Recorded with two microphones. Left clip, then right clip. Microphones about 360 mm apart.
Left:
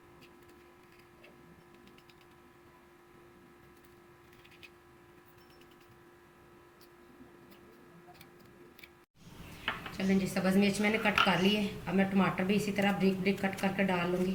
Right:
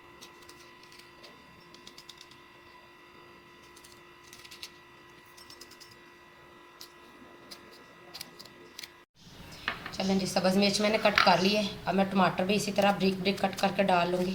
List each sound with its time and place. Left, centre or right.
10.0 s a woman's voice: right